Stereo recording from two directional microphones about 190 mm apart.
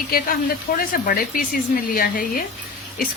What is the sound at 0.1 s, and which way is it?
A woman's voice, 55° left (ahead or behind).